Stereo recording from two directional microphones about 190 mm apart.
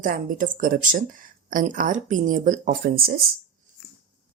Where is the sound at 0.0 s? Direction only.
45° right (ahead or behind).